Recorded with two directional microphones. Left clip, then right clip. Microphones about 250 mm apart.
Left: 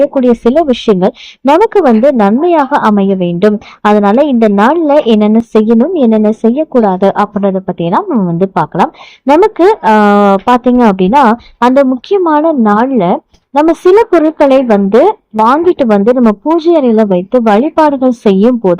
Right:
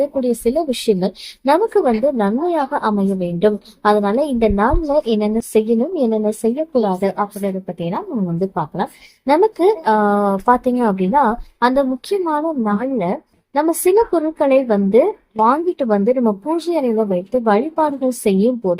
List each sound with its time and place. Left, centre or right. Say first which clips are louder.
0.2 s speech: left 9 dB; left